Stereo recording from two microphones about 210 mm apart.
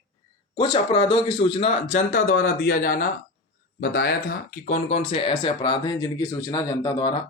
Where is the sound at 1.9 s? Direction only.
40° left (ahead or behind).